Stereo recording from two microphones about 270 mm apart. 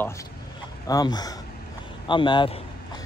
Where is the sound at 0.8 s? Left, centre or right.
Centre.